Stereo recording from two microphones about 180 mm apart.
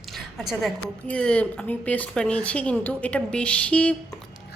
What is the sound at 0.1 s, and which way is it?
A woman's voice, centre (ahead or behind).